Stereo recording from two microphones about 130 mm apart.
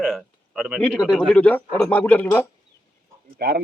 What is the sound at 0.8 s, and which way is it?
A man's voice, 5° left (ahead or behind).